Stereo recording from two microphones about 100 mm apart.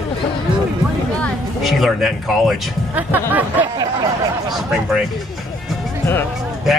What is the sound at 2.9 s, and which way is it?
Speech, 15° right (ahead or behind).